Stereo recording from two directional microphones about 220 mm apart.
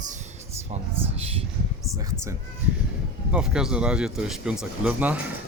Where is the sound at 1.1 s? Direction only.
25° right (ahead or behind).